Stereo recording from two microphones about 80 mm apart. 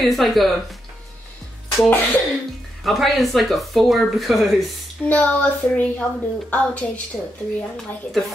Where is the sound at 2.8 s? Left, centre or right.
Centre.